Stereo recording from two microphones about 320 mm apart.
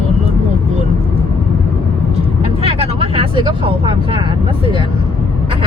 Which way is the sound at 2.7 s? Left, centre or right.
Centre.